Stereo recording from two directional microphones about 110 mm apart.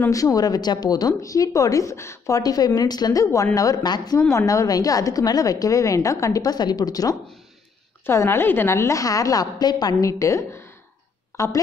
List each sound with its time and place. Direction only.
0.1 s a woman's voice: 30° left (ahead or behind)
4.3 s a woman's voice: 30° left (ahead or behind)
8.1 s a woman's voice: 25° left (ahead or behind)